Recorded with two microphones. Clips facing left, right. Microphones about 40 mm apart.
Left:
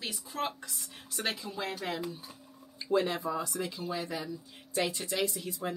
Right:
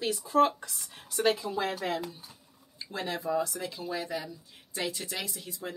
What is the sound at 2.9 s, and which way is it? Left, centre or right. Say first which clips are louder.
Speech: left 7 dB; centre.